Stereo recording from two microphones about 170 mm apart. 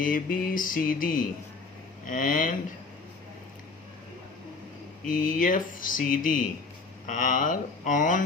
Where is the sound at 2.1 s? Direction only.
50° left (ahead or behind).